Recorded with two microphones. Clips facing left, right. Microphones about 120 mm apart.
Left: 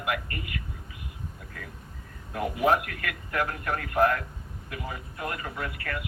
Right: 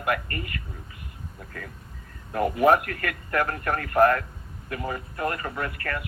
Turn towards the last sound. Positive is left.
turn(degrees=-50)  # may be behind; listen again after turning